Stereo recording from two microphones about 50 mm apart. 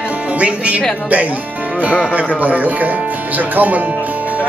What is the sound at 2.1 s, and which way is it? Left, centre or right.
Speech, right.